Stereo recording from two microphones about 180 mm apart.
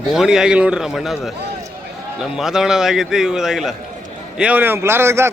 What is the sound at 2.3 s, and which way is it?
A man's voice, 5° right (ahead or behind).